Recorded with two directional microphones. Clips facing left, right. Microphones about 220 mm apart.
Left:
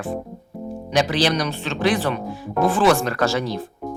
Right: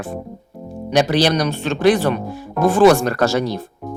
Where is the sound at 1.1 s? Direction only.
40° right (ahead or behind).